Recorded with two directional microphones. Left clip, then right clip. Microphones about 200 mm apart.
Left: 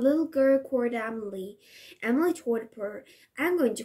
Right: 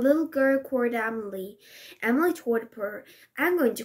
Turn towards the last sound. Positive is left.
turn(degrees=5)  # may be behind; listen again after turning